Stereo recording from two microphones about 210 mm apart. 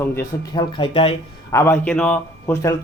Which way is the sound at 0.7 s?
25° left (ahead or behind).